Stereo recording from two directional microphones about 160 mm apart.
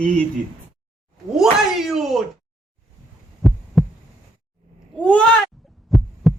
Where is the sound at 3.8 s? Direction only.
5° left (ahead or behind).